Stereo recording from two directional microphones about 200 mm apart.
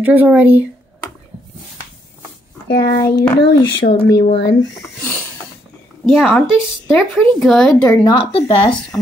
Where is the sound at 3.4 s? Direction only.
60° left (ahead or behind).